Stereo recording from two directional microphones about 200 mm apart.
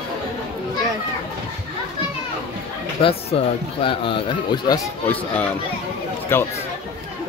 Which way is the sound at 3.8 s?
25° left (ahead or behind).